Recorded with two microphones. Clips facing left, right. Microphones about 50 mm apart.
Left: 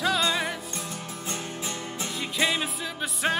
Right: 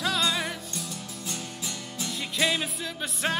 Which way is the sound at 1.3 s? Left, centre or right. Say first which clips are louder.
Left 4 dB; left.